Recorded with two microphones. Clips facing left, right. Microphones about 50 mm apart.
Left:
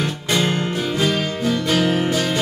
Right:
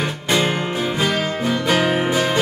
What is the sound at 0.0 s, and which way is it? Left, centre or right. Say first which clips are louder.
Music: right 1 dB; centre.